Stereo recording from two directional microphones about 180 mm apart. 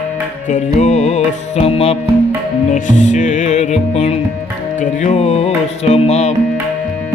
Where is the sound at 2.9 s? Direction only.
40° left (ahead or behind).